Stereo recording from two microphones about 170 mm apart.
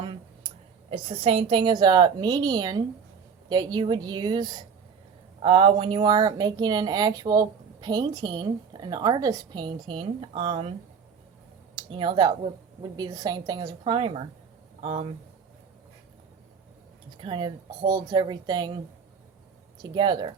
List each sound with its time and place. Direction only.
0.9 s speech: 35° right (ahead or behind)
17.2 s speech: 30° right (ahead or behind)
19.8 s speech: 25° right (ahead or behind)